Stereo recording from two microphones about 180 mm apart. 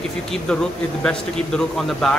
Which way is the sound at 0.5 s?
5° left (ahead or behind).